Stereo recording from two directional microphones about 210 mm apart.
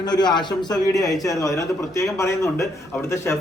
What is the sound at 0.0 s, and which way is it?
A man's voice, 20° left (ahead or behind).